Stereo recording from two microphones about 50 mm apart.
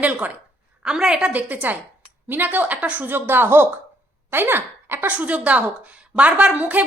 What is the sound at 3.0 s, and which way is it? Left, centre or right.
A woman's voice, right.